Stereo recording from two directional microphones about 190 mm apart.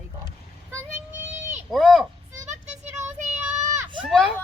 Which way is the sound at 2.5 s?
40° right (ahead or behind).